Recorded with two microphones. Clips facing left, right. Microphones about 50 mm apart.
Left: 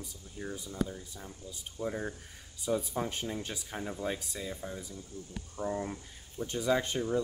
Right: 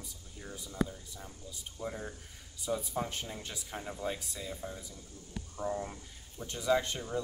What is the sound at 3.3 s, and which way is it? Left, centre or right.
Speech, left.